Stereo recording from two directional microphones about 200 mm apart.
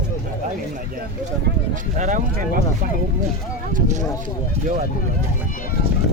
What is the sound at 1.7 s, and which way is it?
Speech, 40° right (ahead or behind).